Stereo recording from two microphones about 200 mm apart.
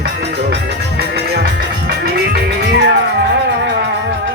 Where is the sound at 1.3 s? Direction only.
50° right (ahead or behind).